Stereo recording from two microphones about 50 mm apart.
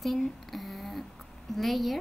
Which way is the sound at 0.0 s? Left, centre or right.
Centre.